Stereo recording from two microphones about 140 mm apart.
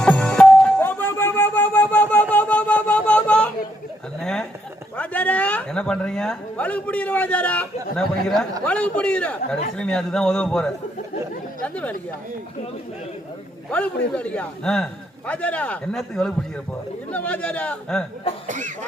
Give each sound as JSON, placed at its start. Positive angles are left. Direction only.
{"t": 0.0, "sound": "music", "side_deg": 5}
{"t": 4.2, "sound": "a sound", "side_deg": 5}
{"t": 4.9, "sound": "a man's voice", "side_deg": 10}
{"t": 11.6, "sound": "chatter", "side_deg": 10}
{"t": 13.7, "sound": "a man's voice", "side_deg": 10}
{"t": 18.4, "sound": "speech", "side_deg": -65}